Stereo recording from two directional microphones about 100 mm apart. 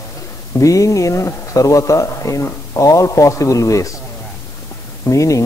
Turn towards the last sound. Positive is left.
turn(degrees=35)  # may be behind; listen again after turning